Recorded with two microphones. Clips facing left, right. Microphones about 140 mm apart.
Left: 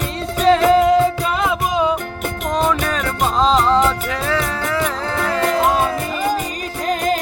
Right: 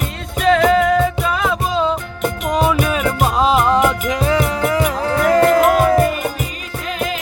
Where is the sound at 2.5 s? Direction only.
5° right (ahead or behind).